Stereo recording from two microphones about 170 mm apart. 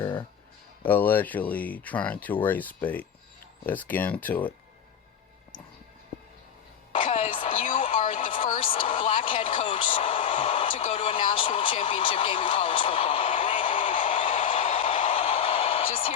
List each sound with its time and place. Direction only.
0.9 s speech: 10° left (ahead or behind)
6.9 s music: 35° left (ahead or behind)
7.5 s music: 50° left (ahead or behind)
7.8 s television: 35° left (ahead or behind)
8.0 s a sound: 50° left (ahead or behind)
8.6 s a sound: 30° left (ahead or behind)